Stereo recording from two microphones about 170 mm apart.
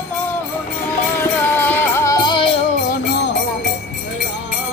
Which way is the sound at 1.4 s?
10° left (ahead or behind).